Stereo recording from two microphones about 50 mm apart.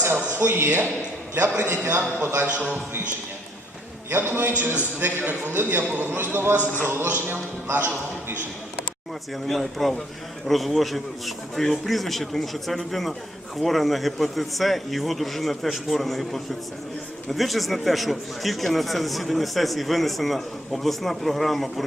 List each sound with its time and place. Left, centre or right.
0.0 s a man's voice: right
2.4 s a man's voice: right
4.1 s a man's voice: right
9.5 s a man's voice: centre